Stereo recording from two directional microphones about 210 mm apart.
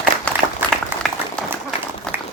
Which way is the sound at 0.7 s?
Centre (ahead or behind).